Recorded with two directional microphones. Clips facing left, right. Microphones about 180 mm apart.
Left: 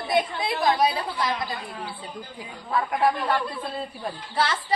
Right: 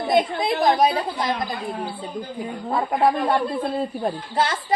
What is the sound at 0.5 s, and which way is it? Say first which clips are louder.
Speech: right 4 dB; 45° right (ahead or behind).